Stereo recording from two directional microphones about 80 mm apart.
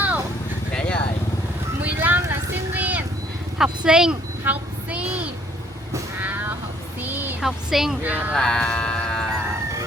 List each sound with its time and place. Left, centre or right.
0.7 s vehicle: centre
1.8 s vehicle: right
3.6 s speech: centre
4.4 s child singing: centre
6.1 s vehicle: right
7.0 s a sound: right
7.4 s speech: centre
8.0 s speech: right
8.3 s music: centre